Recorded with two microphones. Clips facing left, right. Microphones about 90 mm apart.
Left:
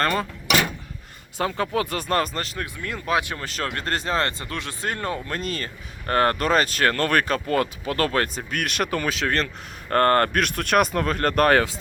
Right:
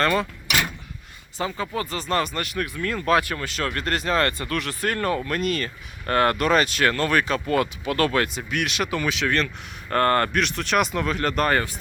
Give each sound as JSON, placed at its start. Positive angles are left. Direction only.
{"t": 0.0, "sound": "speech", "side_deg": 40}
{"t": 1.4, "sound": "speech", "side_deg": 60}
{"t": 2.3, "sound": "speech", "side_deg": 30}
{"t": 3.4, "sound": "speech", "side_deg": 40}